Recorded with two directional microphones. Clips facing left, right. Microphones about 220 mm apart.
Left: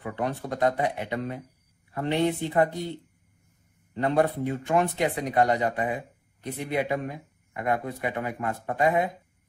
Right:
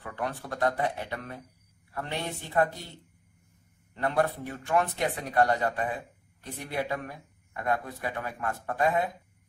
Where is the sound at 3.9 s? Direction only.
20° left (ahead or behind).